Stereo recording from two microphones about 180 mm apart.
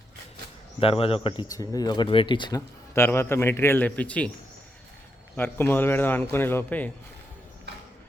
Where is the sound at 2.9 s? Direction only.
15° left (ahead or behind).